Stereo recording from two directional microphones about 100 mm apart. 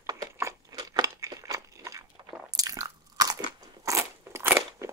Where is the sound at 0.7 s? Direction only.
45° right (ahead or behind).